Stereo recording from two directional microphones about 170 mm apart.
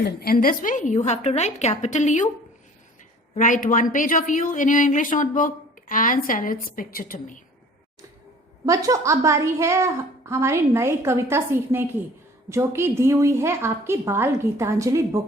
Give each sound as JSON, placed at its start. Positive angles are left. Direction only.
{"t": 0.2, "sound": "a woman's voice", "side_deg": 60}
{"t": 3.3, "sound": "a woman's voice", "side_deg": 50}
{"t": 8.6, "sound": "a woman's voice", "side_deg": -20}